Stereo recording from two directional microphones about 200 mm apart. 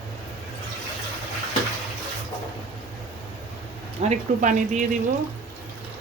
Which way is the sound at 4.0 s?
35° right (ahead or behind).